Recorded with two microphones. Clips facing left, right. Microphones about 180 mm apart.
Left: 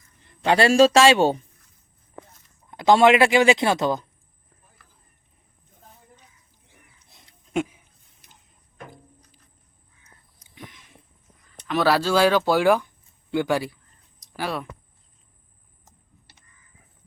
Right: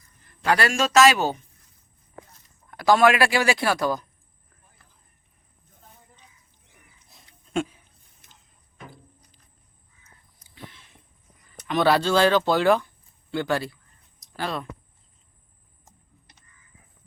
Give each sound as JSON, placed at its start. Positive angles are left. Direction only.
{"t": 0.4, "sound": "speech", "side_deg": 25}
{"t": 2.6, "sound": "speech", "side_deg": 20}
{"t": 7.5, "sound": "speech", "side_deg": 10}
{"t": 10.5, "sound": "a sound", "side_deg": 15}
{"t": 11.7, "sound": "speech", "side_deg": 5}